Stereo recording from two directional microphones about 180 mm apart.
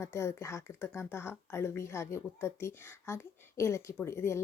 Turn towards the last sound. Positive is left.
turn(degrees=15)  # may be behind; listen again after turning